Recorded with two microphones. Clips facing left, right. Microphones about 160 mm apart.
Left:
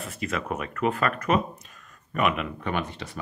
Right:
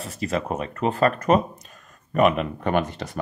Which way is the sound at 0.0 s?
35° right (ahead or behind).